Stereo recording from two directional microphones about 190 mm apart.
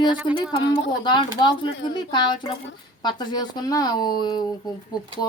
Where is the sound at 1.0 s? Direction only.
25° left (ahead or behind).